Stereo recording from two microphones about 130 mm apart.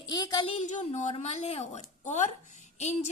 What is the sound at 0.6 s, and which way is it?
A woman's voice, 70° left (ahead or behind).